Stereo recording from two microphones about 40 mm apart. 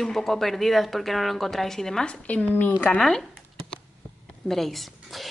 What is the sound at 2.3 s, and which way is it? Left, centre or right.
Speech, left.